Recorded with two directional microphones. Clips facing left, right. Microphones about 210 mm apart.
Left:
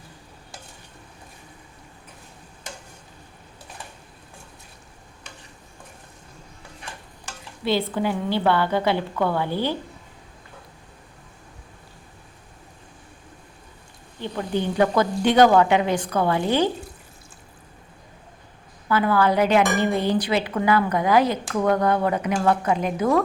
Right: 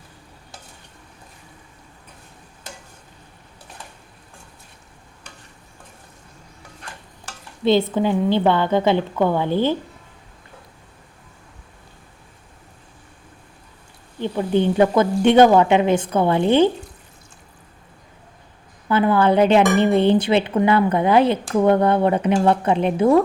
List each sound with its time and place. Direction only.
7.6 s speech: 25° right (ahead or behind)
14.2 s speech: 20° right (ahead or behind)
18.9 s speech: 25° right (ahead or behind)